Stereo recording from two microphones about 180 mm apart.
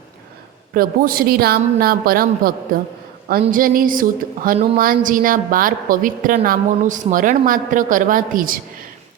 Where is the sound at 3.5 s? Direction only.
50° right (ahead or behind).